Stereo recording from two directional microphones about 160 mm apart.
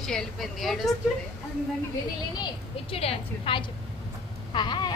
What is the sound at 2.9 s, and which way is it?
A woman's voice, 35° left (ahead or behind).